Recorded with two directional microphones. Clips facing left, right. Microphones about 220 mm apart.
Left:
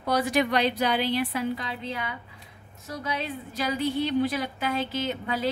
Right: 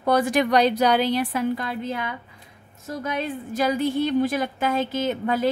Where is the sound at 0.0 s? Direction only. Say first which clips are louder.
Right 4 dB; 50° right (ahead or behind).